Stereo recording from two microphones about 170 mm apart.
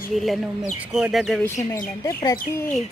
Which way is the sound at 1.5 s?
20° left (ahead or behind).